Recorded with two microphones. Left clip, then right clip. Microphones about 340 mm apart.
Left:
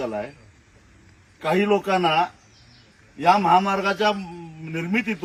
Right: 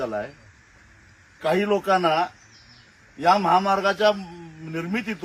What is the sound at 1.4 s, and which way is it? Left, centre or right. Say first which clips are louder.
Speech: left 1 dB; centre.